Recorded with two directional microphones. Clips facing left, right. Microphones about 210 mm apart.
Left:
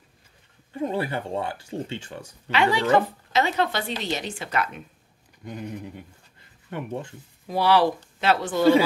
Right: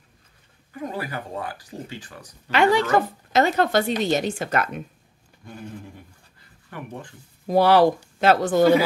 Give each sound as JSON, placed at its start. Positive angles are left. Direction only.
{"t": 0.7, "sound": "speech", "side_deg": 25}
{"t": 2.5, "sound": "a woman's voice", "side_deg": -45}
{"t": 5.4, "sound": "speech", "side_deg": 15}
{"t": 7.4, "sound": "a woman's voice", "side_deg": -45}